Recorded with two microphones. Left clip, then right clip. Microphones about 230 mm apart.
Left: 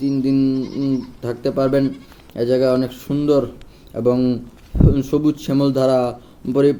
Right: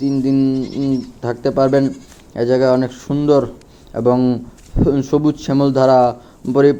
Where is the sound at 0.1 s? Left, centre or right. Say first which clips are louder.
Right 2 dB; centre.